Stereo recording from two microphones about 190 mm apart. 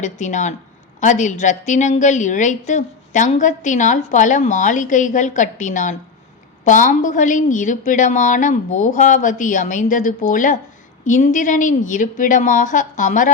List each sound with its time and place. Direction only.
0.0 s a woman's voice: 40° left (ahead or behind)